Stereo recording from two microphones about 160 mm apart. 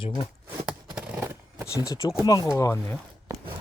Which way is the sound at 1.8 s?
25° left (ahead or behind).